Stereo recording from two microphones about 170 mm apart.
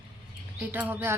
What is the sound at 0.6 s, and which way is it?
Speech, 10° right (ahead or behind).